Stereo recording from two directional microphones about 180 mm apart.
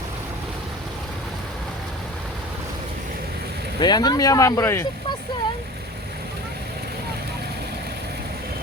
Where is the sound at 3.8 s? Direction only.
25° left (ahead or behind).